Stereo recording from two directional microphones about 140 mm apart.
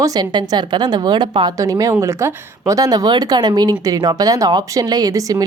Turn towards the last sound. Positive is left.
turn(degrees=-25)  # may be behind; listen again after turning